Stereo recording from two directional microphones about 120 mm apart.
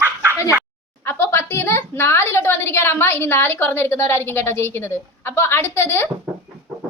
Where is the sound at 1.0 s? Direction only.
20° left (ahead or behind).